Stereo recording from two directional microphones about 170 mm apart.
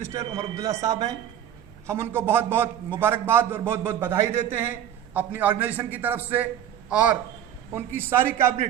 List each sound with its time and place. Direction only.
0.0 s a man's voice: 20° right (ahead or behind)